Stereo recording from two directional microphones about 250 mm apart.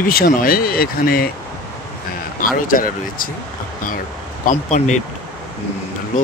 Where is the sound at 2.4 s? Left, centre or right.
Left.